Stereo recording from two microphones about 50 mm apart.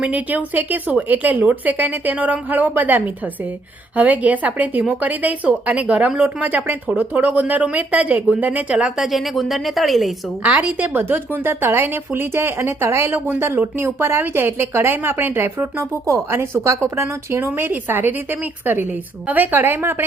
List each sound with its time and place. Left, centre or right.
0.0 s speech: right
8.8 s a woman's voice: centre
10.4 s a woman's voice: right
10.9 s a woman's voice: right
13.1 s a woman's voice: right
15.8 s speech: right
16.3 s speech: right
17.4 s a woman's voice: right